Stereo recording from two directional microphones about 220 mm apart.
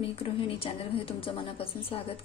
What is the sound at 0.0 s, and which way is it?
A woman's voice, 25° left (ahead or behind).